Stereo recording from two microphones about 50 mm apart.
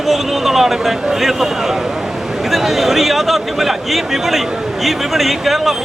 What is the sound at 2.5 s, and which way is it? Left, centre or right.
Speech, centre.